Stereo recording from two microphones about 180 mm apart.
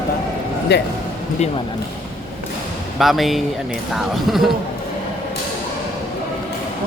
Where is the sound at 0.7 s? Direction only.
70° left (ahead or behind).